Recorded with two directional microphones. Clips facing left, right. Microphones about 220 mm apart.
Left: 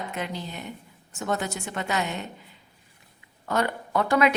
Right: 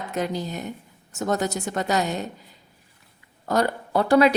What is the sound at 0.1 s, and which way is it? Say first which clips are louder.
A woman's voice: right 6 dB; 40° right (ahead or behind).